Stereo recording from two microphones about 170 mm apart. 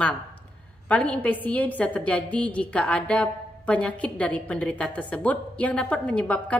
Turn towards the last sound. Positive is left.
turn(degrees=5)  # may be behind; listen again after turning